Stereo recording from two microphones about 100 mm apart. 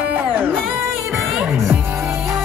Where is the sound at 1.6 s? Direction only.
25° right (ahead or behind).